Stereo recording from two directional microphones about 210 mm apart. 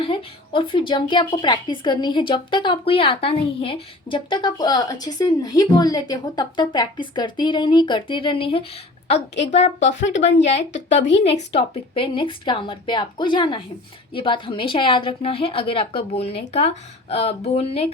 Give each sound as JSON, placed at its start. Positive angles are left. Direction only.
{"t": 0.0, "sound": "a woman's voice", "side_deg": 25}
{"t": 9.8, "sound": "speech", "side_deg": 60}
{"t": 11.2, "sound": "a woman's voice", "side_deg": 30}